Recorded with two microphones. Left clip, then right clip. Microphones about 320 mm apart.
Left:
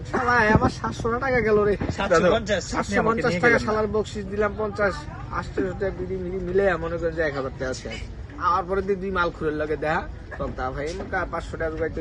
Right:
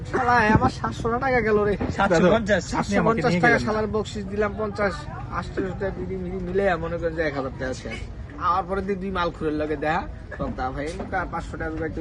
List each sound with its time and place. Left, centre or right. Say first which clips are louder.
0.3 s a man's voice: left 1 dB; centre
1.9 s speech: right 2 dB; right
2.6 s a man's voice: even; centre